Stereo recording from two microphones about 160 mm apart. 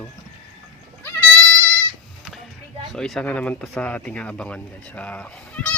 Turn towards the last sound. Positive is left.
turn(degrees=10)  # may be behind; listen again after turning